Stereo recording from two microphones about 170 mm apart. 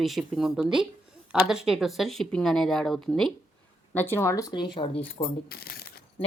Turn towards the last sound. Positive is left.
turn(degrees=65)  # may be behind; listen again after turning